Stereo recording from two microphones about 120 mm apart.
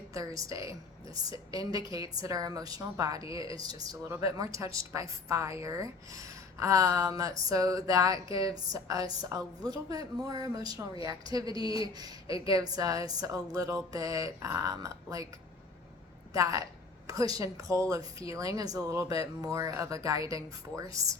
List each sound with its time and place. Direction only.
0.1 s a woman's voice: 30° right (ahead or behind)
16.3 s a woman's voice: 30° right (ahead or behind)